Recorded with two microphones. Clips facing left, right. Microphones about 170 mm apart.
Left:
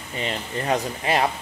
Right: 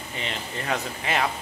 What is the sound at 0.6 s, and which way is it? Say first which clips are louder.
Speech: left 5 dB; 35° left (ahead or behind).